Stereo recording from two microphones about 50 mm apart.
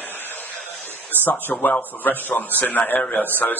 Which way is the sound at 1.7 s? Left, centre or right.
Left.